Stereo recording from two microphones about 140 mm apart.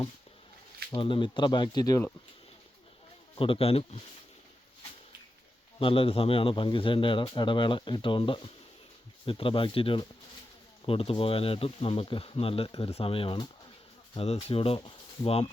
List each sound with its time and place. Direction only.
0.9 s speech: 35° left (ahead or behind)
3.3 s speech: 40° left (ahead or behind)
5.8 s speech: 40° left (ahead or behind)